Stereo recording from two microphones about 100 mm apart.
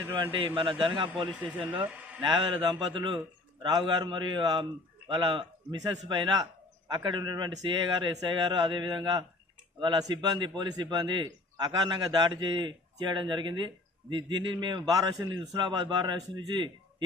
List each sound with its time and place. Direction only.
0.2 s a man's voice: 55° right (ahead or behind)
1.3 s speech: 10° right (ahead or behind)
2.2 s a man's voice: 50° right (ahead or behind)